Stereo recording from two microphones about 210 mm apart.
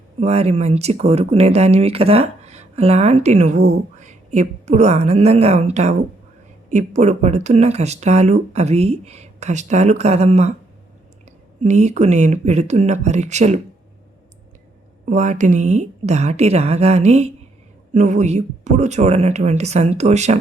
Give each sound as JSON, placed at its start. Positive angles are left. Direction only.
{"t": 0.2, "sound": "a woman's voice", "side_deg": -30}
{"t": 11.6, "sound": "speech", "side_deg": -35}
{"t": 15.1, "sound": "speech", "side_deg": -35}